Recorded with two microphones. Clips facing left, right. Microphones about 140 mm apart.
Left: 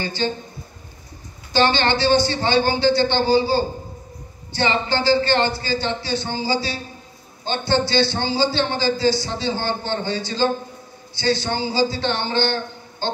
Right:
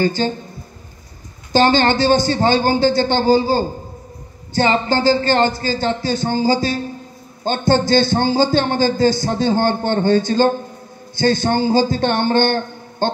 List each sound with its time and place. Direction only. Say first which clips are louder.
0.0 s a man's voice: right 7 dB; 45° right (ahead or behind)
1.5 s a man's voice: right 4 dB; 40° right (ahead or behind)